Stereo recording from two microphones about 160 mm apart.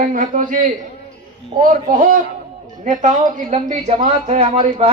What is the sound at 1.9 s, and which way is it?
A man's voice, 55° right (ahead or behind).